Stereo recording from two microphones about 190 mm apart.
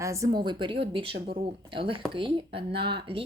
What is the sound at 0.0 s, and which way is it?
Speech, 15° right (ahead or behind).